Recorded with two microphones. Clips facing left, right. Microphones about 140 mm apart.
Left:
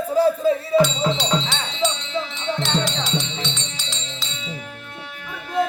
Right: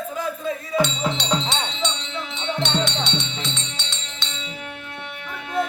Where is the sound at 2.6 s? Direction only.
Centre (ahead or behind).